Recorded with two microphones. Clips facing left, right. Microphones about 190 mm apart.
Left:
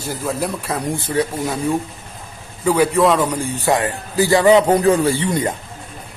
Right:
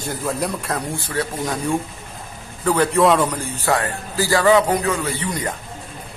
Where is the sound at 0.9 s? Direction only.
20° left (ahead or behind).